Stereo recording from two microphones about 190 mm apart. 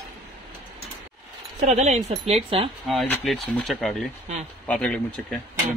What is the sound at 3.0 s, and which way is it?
Speech, centre (ahead or behind).